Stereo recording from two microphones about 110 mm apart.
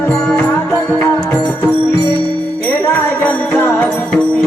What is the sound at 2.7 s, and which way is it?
Music, 15° left (ahead or behind).